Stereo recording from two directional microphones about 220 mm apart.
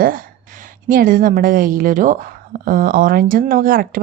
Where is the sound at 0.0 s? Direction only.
40° right (ahead or behind).